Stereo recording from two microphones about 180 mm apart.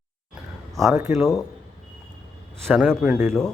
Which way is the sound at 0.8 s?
15° right (ahead or behind).